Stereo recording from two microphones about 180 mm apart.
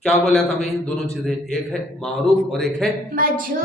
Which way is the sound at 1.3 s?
Centre (ahead or behind).